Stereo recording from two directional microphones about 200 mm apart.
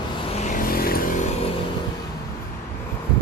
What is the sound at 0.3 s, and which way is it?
Vehicle, 40° left (ahead or behind).